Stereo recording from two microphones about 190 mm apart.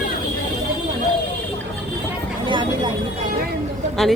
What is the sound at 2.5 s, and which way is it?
Speech, 25° right (ahead or behind).